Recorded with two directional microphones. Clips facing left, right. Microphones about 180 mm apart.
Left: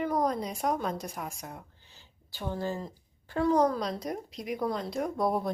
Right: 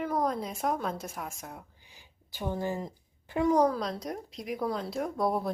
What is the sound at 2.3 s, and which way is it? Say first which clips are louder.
Speech: right 1 dB; 15° right (ahead or behind).